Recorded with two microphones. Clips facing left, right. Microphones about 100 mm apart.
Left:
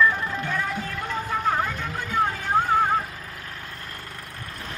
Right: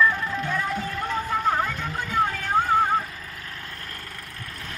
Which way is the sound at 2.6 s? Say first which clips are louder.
Right 1 dB; 5° left (ahead or behind).